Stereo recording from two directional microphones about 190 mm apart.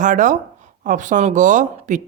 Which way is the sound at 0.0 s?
40° right (ahead or behind).